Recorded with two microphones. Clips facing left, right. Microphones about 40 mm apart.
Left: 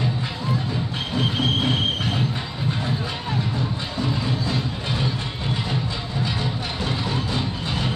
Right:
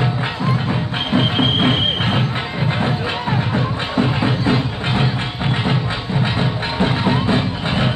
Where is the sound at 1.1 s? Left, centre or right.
Right.